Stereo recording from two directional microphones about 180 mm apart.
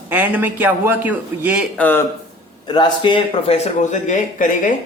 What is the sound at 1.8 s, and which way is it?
Speech, 10° left (ahead or behind).